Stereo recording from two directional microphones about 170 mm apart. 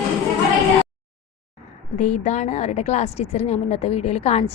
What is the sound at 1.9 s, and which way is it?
A woman's voice, 45° left (ahead or behind).